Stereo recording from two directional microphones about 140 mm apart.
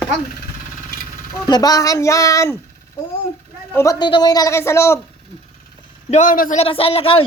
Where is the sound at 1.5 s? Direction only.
30° left (ahead or behind).